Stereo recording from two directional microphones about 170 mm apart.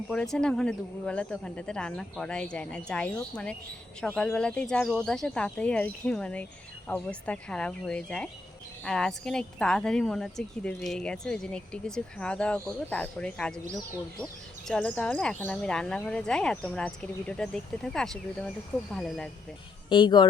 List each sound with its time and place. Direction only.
0.1 s speech: 5° left (ahead or behind)
14.7 s speech: 10° left (ahead or behind)
19.9 s speech: 25° left (ahead or behind)